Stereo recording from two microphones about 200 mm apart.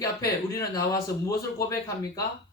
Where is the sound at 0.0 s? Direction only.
15° left (ahead or behind).